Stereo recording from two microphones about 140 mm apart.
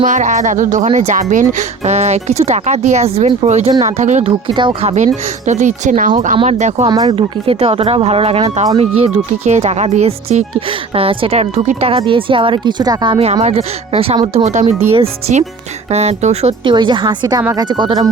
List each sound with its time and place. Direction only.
0.0 s speech: 60° right (ahead or behind)
4.3 s speech: 35° right (ahead or behind)
5.5 s speech: 60° right (ahead or behind)
6.8 s speech: 25° right (ahead or behind)
7.2 s speech: 40° right (ahead or behind)
11.9 s speech: 40° right (ahead or behind)
13.4 s speech: 45° right (ahead or behind)
14.3 s speech: 55° right (ahead or behind)
16.6 s speech: 35° right (ahead or behind)